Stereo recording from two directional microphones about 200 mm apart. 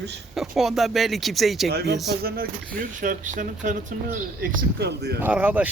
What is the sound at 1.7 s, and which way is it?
Speech, 55° right (ahead or behind).